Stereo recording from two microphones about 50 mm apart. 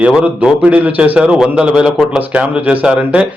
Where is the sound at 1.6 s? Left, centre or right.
Centre.